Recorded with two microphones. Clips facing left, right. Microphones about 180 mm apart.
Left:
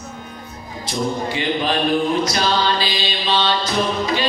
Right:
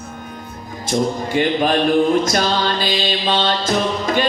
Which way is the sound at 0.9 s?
50° right (ahead or behind).